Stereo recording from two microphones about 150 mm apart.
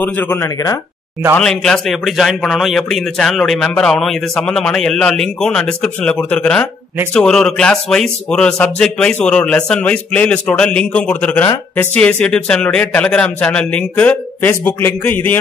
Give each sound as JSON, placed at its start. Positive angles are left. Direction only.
{"t": 0.0, "sound": "speech", "side_deg": 15}
{"t": 1.4, "sound": "a man's voice", "side_deg": 5}